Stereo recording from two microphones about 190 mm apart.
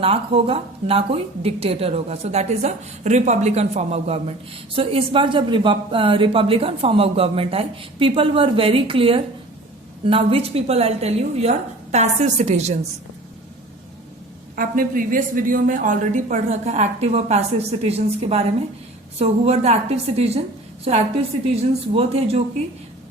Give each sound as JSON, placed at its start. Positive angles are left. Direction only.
{"t": 0.0, "sound": "a woman's voice", "side_deg": -30}
{"t": 14.5, "sound": "a woman's voice", "side_deg": -45}